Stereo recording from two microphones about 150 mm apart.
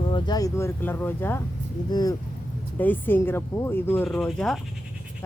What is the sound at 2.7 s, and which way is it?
Speech, 10° left (ahead or behind).